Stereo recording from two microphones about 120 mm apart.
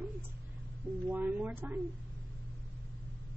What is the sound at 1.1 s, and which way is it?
Speech, 15° right (ahead or behind).